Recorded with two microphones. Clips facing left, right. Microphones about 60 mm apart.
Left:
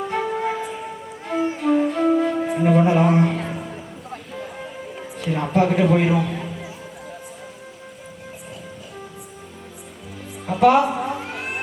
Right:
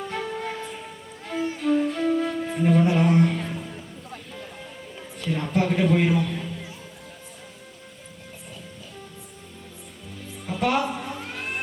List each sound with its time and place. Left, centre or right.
0.0 s music: centre
1.6 s flute: centre
5.1 s a man's voice: centre
10.6 s a woman's voice: centre
10.9 s cat: centre